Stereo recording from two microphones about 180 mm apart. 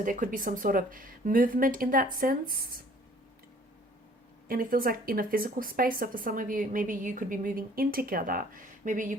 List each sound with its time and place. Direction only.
0.0 s speech: 50° right (ahead or behind)
4.4 s speech: 50° right (ahead or behind)